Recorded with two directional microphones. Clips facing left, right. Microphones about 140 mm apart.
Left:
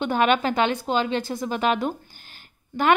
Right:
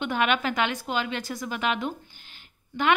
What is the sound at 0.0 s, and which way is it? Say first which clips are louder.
A woman's voice: left 4 dB; 35° left (ahead or behind).